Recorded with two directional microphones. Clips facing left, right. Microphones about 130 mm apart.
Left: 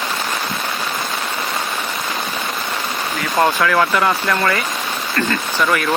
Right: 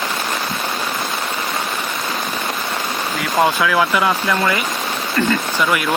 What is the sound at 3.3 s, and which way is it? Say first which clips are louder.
Speech: even; 5° right (ahead or behind).